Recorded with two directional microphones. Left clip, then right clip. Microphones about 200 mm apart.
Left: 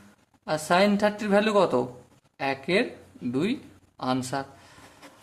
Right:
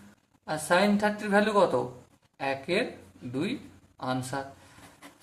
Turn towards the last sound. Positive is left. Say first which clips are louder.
# left 4 dB
turn(degrees=40)  # may be behind; listen again after turning